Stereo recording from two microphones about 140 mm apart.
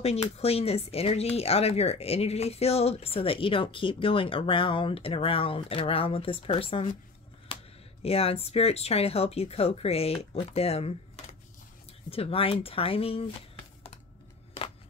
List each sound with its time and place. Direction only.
0.0 s speech: 45° left (ahead or behind)
7.5 s a sound: 40° left (ahead or behind)
8.0 s speech: 45° left (ahead or behind)